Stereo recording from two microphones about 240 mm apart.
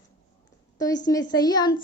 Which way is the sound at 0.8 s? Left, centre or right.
Centre.